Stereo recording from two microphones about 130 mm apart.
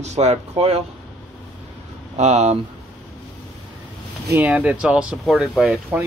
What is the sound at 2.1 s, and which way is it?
Speech, 60° right (ahead or behind).